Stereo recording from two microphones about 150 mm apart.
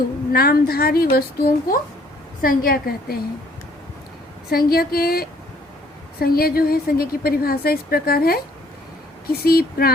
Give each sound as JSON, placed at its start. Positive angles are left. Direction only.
{"t": 0.3, "sound": "a woman's voice", "side_deg": 85}
{"t": 4.4, "sound": "a woman's voice", "side_deg": 90}